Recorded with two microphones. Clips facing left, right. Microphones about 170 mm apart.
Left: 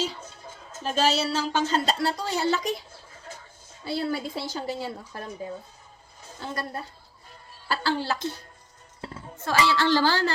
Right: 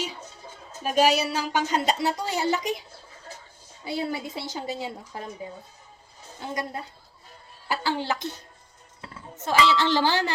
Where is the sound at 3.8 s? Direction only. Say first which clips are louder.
Left 1 dB; 15° right (ahead or behind).